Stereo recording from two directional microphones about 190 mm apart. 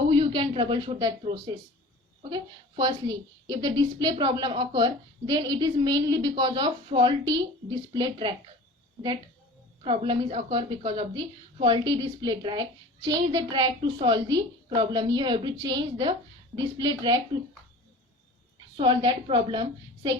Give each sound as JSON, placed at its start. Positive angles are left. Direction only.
{"t": 0.1, "sound": "a woman's voice", "side_deg": -25}
{"t": 9.8, "sound": "a woman's voice", "side_deg": -25}
{"t": 18.8, "sound": "a woman's voice", "side_deg": -25}